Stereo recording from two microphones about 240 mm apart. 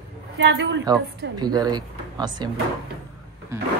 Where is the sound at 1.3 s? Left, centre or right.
Centre.